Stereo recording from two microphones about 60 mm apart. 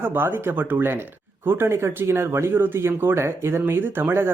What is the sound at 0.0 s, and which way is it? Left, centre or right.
Speech, right.